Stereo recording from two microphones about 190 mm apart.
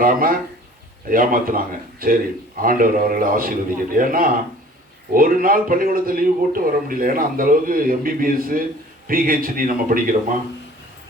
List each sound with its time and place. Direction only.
0.0 s a man's voice: 50° right (ahead or behind)